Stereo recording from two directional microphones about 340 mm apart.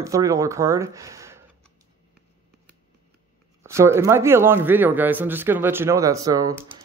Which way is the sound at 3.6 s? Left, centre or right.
Centre.